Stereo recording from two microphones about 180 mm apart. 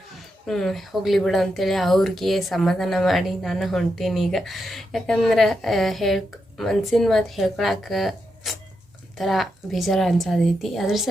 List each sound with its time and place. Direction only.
0.4 s speech: centre (ahead or behind)